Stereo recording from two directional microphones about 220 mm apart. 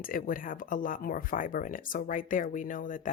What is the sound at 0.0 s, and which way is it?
Speech, 40° left (ahead or behind).